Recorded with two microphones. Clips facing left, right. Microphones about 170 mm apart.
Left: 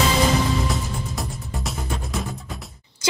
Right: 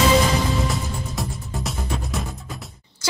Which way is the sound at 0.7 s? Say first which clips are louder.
Even; centre (ahead or behind).